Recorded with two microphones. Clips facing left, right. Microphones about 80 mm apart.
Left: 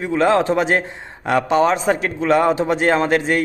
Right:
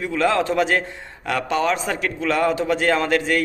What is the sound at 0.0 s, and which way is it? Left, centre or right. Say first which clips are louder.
A man's voice: left 4 dB; left.